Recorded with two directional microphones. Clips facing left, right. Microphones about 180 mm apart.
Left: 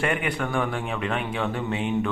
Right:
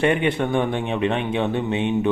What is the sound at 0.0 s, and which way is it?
Speech, 25° right (ahead or behind).